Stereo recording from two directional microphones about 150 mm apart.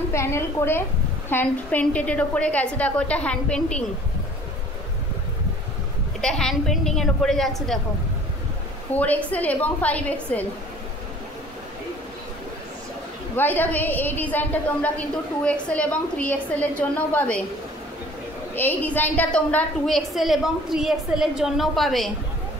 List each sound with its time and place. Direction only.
0.1 s a woman's voice: 20° left (ahead or behind)
6.2 s a woman's voice: 5° left (ahead or behind)
8.9 s a woman's voice: 10° left (ahead or behind)
13.4 s a woman's voice: 10° left (ahead or behind)
18.5 s a woman's voice: 10° left (ahead or behind)